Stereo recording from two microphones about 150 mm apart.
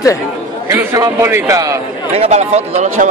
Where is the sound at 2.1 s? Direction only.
45° right (ahead or behind).